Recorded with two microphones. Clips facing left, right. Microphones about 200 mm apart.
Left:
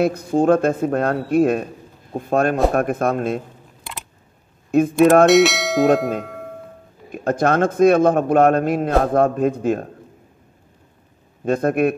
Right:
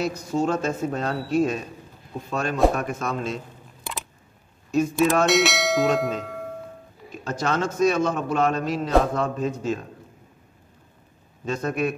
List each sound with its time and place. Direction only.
0.0 s a man's voice: 55° left (ahead or behind)
4.6 s a man's voice: 55° left (ahead or behind)
5.2 s bell: centre (ahead or behind)
6.2 s music: centre (ahead or behind)
7.1 s a man's voice: 55° left (ahead or behind)
11.4 s a man's voice: 55° left (ahead or behind)